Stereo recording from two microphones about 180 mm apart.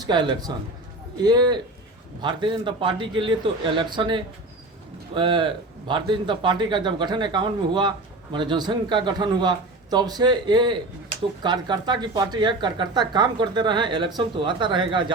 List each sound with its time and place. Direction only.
0.0 s speech: 25° right (ahead or behind)